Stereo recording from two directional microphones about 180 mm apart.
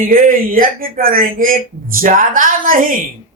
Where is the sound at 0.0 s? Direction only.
50° right (ahead or behind).